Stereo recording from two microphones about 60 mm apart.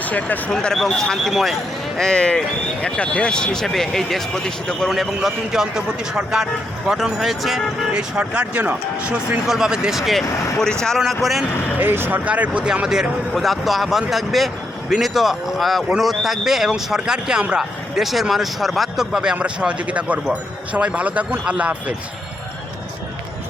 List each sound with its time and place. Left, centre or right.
0.0 s speech: left
0.5 s a man's voice: centre
2.0 s speech: centre
5.5 s a man's voice: centre
7.9 s speech: right
9.5 s a man's voice: centre
10.6 s a man's voice: centre
11.8 s speech: right
12.2 s a man's voice: right